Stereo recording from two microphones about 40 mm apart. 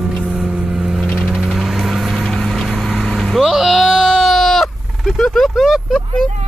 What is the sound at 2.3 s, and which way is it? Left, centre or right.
Vehicle, centre.